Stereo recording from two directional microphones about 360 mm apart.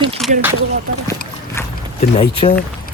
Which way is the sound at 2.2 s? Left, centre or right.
Centre.